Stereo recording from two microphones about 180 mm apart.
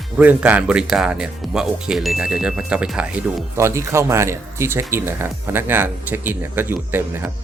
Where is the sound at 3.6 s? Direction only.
15° right (ahead or behind).